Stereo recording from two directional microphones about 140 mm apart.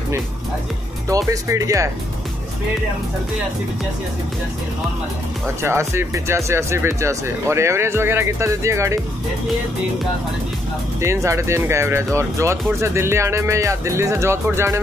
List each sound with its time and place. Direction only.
1.0 s speech: 25° right (ahead or behind)
5.6 s speech: 20° right (ahead or behind)
11.0 s speech: 20° right (ahead or behind)